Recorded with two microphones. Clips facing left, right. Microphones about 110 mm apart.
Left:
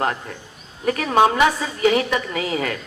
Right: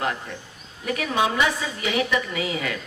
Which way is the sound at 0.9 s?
45° left (ahead or behind).